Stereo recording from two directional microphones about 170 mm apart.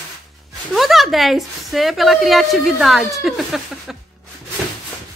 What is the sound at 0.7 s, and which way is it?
A woman's voice, centre (ahead or behind).